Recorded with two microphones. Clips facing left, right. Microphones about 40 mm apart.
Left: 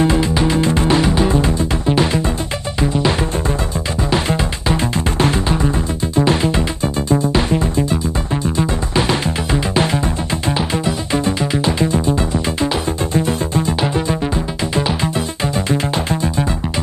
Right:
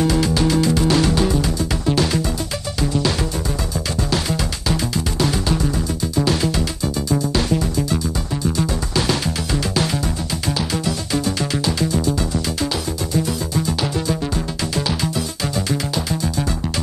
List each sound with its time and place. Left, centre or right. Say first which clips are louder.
0.0 s music: left 2 dB; left